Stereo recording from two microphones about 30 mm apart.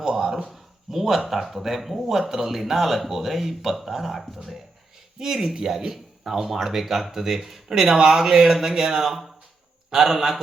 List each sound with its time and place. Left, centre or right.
0.1 s a sound: centre
0.4 s speech: centre
5.2 s speech: centre